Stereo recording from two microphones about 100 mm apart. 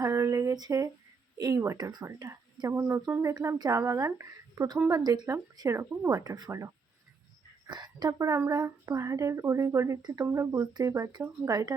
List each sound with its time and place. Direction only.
0.0 s a sound: 30° right (ahead or behind)
1.4 s speech: 35° right (ahead or behind)
6.1 s speech: 40° right (ahead or behind)
7.7 s a woman's voice: 45° right (ahead or behind)
8.3 s speech: 30° right (ahead or behind)